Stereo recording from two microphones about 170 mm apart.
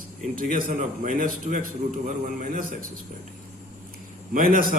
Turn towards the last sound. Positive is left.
turn(degrees=-55)  # may be behind; listen again after turning